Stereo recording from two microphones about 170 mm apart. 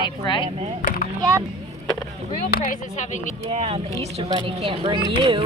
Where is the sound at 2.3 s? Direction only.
60° left (ahead or behind).